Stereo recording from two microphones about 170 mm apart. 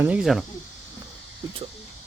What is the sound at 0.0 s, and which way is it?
Speech, 5° right (ahead or behind).